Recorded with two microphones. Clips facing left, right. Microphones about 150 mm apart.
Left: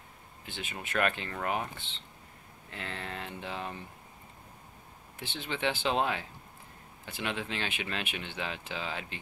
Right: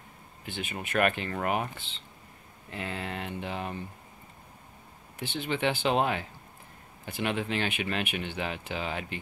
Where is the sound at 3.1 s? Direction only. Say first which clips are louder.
Right 4 dB; 60° right (ahead or behind).